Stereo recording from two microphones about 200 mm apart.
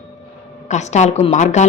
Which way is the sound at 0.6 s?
35° left (ahead or behind).